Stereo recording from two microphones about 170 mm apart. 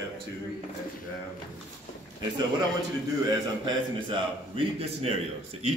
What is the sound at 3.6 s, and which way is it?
A man's voice, 30° right (ahead or behind).